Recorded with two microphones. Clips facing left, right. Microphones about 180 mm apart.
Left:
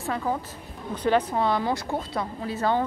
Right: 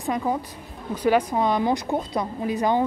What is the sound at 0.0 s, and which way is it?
Speech, 15° right (ahead or behind).